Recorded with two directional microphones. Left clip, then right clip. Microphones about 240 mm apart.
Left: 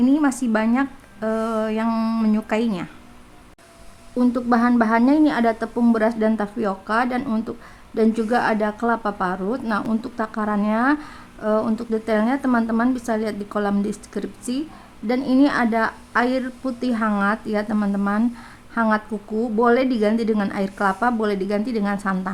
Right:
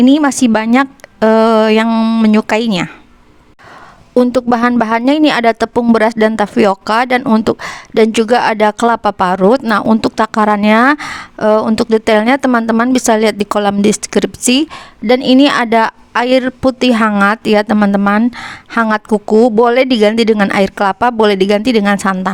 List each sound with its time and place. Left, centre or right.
0.0 s speech: right
1.9 s speech: right
4.2 s speech: right